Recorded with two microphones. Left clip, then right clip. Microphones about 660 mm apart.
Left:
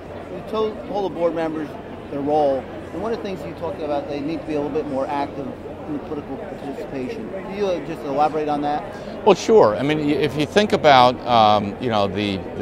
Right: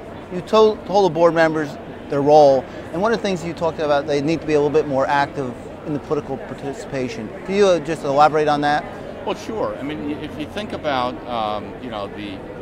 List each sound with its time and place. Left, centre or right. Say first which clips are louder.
0.5 s speech: right 9 dB; right
7.5 s speech: right 8 dB; right
9.2 s speech: left 11 dB; left